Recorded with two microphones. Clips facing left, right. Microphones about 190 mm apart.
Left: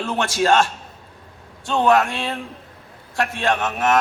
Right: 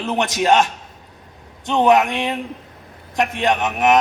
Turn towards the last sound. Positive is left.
turn(degrees=-15)  # may be behind; listen again after turning